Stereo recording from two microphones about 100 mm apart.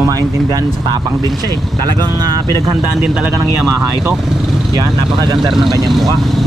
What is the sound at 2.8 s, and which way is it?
Speech, 15° right (ahead or behind).